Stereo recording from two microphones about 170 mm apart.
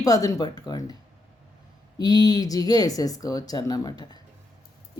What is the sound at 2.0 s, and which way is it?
Speech, 25° left (ahead or behind).